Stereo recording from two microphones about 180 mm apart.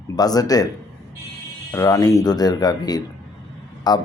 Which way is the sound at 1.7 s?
20° left (ahead or behind).